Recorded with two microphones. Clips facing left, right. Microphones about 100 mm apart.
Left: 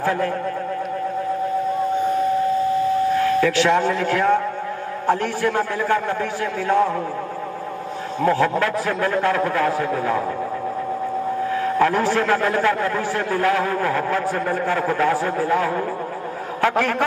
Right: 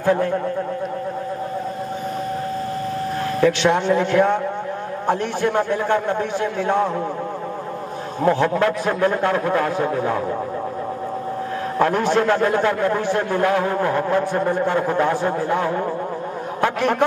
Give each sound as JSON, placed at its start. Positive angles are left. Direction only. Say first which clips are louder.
{"t": 0.0, "sound": "speech", "louder": "right 3 dB", "side_deg": -20}
{"t": 3.2, "sound": "a man's voice", "louder": "left 1 dB", "side_deg": -30}
{"t": 8.2, "sound": "a man's voice", "louder": "right 1 dB", "side_deg": -25}
{"t": 11.8, "sound": "a man's voice", "louder": "right 2 dB", "side_deg": -20}